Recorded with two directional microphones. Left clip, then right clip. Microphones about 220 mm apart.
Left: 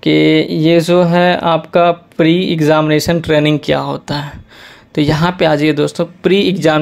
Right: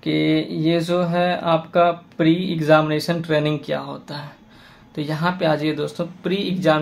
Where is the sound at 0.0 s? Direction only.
35° left (ahead or behind).